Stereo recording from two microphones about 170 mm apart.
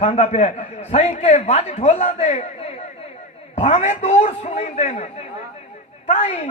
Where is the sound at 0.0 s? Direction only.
40° left (ahead or behind).